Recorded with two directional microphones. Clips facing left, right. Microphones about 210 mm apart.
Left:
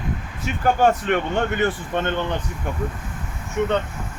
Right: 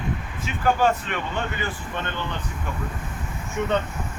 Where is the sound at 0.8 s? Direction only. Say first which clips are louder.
Left 4 dB; 55° left (ahead or behind).